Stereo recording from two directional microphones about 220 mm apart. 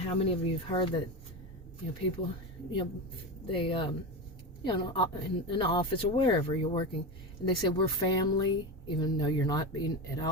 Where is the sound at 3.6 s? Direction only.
25° left (ahead or behind).